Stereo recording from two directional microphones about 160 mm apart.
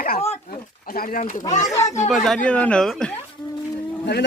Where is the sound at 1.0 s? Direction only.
50° left (ahead or behind).